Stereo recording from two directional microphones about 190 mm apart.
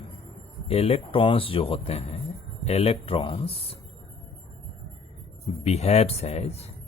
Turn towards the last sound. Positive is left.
turn(degrees=35)  # may be behind; listen again after turning